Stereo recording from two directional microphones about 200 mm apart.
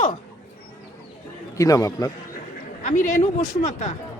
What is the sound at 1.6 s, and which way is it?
Speech, 15° left (ahead or behind).